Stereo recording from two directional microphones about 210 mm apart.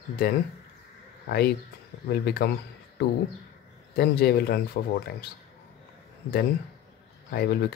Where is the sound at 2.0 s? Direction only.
50° left (ahead or behind).